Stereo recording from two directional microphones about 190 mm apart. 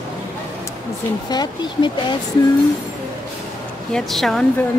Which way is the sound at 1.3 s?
20° left (ahead or behind).